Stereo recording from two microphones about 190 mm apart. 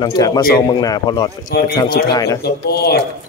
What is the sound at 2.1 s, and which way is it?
Speech, 15° left (ahead or behind).